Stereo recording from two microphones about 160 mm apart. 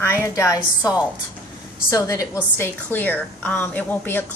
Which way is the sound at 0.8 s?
5° right (ahead or behind).